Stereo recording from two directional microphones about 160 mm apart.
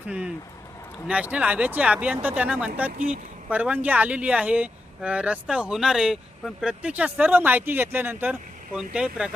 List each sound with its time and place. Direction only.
1.0 s speech: 10° right (ahead or behind)